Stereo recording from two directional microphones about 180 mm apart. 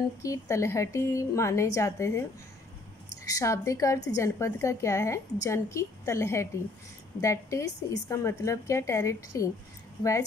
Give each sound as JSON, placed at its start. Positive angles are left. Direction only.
{"t": 0.2, "sound": "a woman's voice", "side_deg": 15}
{"t": 3.3, "sound": "a woman's voice", "side_deg": 20}